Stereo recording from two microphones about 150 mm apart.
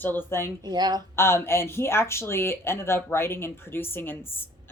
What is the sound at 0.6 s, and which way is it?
Speech, 30° right (ahead or behind).